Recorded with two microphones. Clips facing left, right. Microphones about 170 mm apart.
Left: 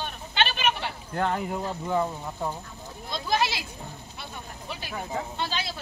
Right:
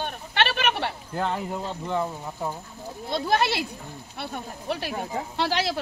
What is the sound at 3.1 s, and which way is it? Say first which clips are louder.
Speech: right 3 dB; 60° right (ahead or behind).